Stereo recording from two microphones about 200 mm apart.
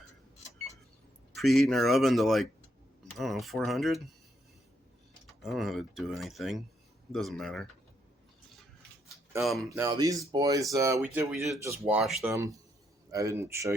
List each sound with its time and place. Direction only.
1.3 s speech: centre (ahead or behind)
5.2 s speech: centre (ahead or behind)
9.4 s speech: centre (ahead or behind)
9.6 s speech: 15° right (ahead or behind)
12.3 s speech: 15° right (ahead or behind)